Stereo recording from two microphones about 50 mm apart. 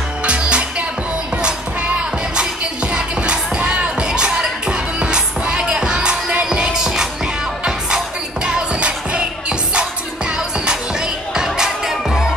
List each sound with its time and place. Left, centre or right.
0.2 s music: right; by 12.3 s centre